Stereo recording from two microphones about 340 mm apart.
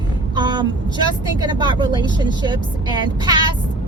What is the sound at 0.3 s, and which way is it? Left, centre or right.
Vehicle, centre.